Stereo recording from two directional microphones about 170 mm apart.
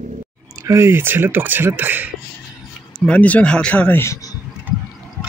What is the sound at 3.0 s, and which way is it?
Speech, 10° left (ahead or behind).